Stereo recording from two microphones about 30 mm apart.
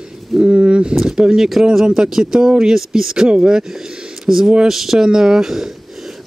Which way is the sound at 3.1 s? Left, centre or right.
Right.